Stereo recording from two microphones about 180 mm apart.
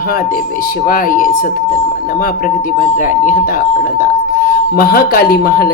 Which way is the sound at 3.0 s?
50° left (ahead or behind).